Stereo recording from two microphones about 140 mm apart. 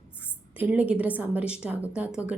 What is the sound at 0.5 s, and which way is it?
A woman's voice, 10° right (ahead or behind).